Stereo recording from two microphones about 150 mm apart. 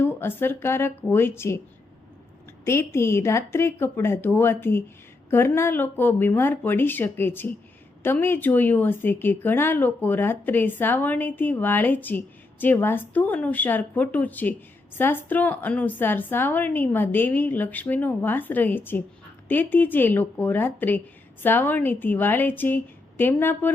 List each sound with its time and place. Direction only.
0.0 s speech: 15° left (ahead or behind)
2.6 s speech: 15° left (ahead or behind)